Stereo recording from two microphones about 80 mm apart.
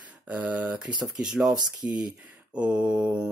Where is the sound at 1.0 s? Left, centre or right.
Centre.